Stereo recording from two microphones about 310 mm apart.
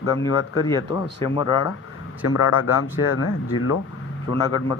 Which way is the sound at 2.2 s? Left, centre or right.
Left.